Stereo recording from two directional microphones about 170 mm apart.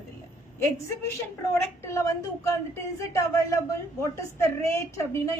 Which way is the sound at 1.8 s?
15° left (ahead or behind).